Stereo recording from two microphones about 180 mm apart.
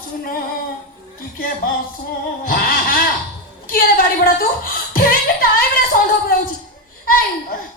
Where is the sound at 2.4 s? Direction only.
50° left (ahead or behind).